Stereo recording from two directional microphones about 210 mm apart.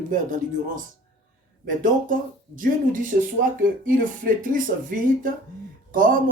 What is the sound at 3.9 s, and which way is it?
Speech, 40° right (ahead or behind).